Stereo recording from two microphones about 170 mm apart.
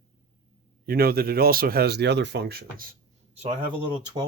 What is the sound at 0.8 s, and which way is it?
Speech, 65° right (ahead or behind).